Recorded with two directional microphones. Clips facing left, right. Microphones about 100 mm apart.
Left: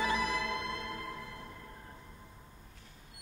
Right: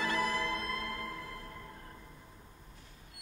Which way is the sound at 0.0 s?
15° left (ahead or behind).